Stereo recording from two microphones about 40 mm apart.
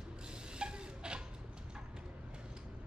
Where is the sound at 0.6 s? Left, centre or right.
Right.